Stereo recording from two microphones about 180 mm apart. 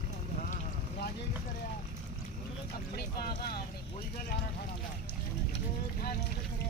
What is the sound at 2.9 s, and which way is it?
Vehicle, 60° left (ahead or behind).